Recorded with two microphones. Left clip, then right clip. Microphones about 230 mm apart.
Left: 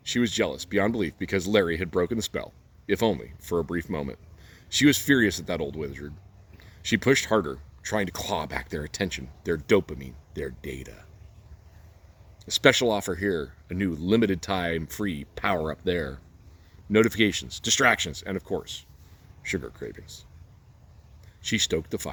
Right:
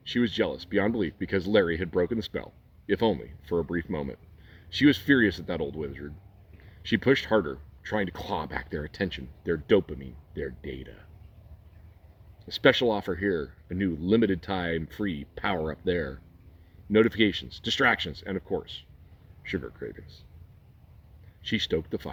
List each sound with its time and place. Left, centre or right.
0.0 s speech: left
12.5 s speech: left
21.4 s speech: left